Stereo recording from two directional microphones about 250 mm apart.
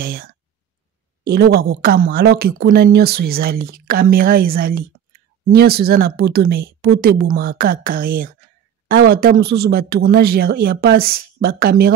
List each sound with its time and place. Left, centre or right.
0.0 s speech: right